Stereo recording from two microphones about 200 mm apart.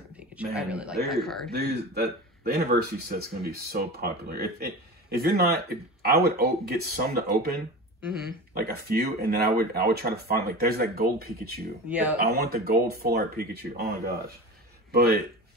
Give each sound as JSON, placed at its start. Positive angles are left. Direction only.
{"t": 0.7, "sound": "a man's voice", "side_deg": -5}
{"t": 1.5, "sound": "speech", "side_deg": -50}
{"t": 8.5, "sound": "speech", "side_deg": -50}
{"t": 11.9, "sound": "speech", "side_deg": -5}
{"t": 12.2, "sound": "speech", "side_deg": -50}